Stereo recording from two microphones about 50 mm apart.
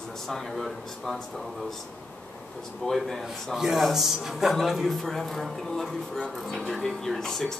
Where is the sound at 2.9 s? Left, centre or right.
Left.